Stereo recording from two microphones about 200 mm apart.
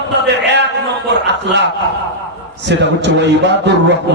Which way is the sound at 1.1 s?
60° right (ahead or behind).